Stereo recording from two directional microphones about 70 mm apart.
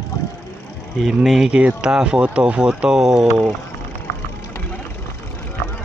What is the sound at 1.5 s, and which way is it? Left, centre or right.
Speech, centre.